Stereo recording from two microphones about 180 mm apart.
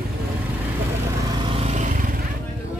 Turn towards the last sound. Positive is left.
turn(degrees=-40)  # may be behind; listen again after turning